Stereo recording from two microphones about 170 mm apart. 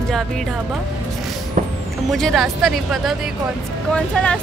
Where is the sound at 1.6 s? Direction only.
50° right (ahead or behind).